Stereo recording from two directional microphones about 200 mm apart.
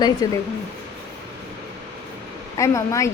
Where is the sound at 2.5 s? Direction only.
15° left (ahead or behind).